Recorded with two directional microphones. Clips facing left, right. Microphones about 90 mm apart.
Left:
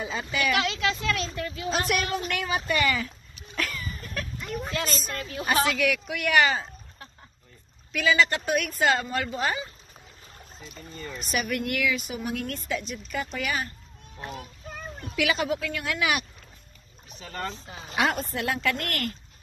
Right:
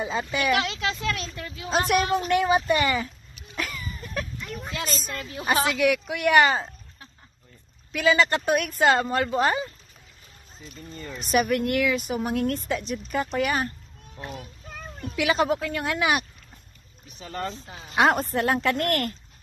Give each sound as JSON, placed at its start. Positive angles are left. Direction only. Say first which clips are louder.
{"t": 0.0, "sound": "speech", "louder": "right 2 dB", "side_deg": -25}
{"t": 3.5, "sound": "a sound", "louder": "even", "side_deg": -20}
{"t": 4.4, "sound": "a sound", "louder": "left 3 dB", "side_deg": 10}
{"t": 4.6, "sound": "a woman's voice", "louder": "right 1 dB", "side_deg": -10}
{"t": 7.9, "sound": "a woman's voice", "louder": "right 2 dB", "side_deg": -30}
{"t": 11.0, "sound": "speech", "louder": "even", "side_deg": -20}
{"t": 11.4, "sound": "a woman's voice", "louder": "right 4 dB", "side_deg": -30}
{"t": 15.1, "sound": "speech", "louder": "right 3 dB", "side_deg": -30}
{"t": 18.3, "sound": "a woman's voice", "louder": "right 4 dB", "side_deg": -40}